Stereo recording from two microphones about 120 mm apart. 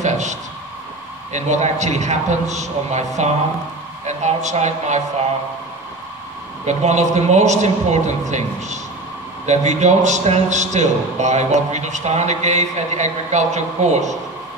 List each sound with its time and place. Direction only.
0.0 s a sound: 75° right (ahead or behind)
1.3 s a man's voice: 75° right (ahead or behind)
6.6 s a man's voice: 70° right (ahead or behind)